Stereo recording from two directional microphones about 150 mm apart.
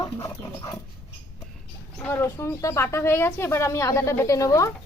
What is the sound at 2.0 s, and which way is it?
Speech, 15° left (ahead or behind).